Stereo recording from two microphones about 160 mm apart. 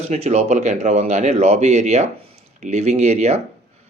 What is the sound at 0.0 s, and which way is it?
Speech, 45° right (ahead or behind).